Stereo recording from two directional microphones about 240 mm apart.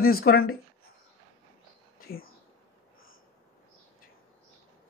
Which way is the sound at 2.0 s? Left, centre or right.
Left.